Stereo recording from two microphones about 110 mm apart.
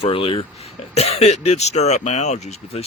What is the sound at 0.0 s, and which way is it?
Speech, 60° left (ahead or behind).